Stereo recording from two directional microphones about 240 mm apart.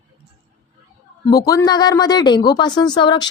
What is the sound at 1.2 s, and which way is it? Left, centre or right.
Speech, centre.